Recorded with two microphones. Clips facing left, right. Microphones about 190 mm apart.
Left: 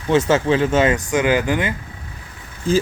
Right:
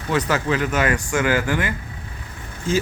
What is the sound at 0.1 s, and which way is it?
Speech, 25° left (ahead or behind).